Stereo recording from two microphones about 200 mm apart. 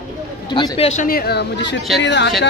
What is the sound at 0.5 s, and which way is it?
A man's voice, 25° left (ahead or behind).